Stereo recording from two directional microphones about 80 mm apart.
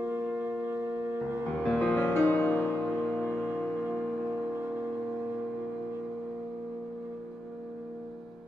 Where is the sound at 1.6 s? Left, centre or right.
Centre.